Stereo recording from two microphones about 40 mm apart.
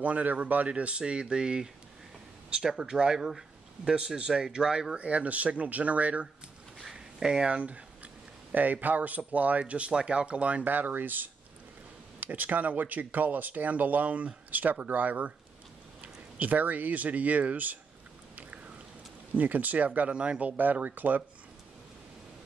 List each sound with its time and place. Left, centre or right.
0.0 s speech: right
2.8 s speech: centre
4.9 s speech: right
6.9 s a sound: centre
7.5 s a sound: right
8.8 s speech: right
10.6 s speech: right
19.3 s speech: right